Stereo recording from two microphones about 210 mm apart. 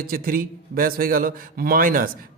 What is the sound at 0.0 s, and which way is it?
Speech, 45° right (ahead or behind).